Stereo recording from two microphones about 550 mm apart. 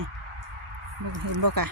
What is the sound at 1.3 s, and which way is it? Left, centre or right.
Speech, right.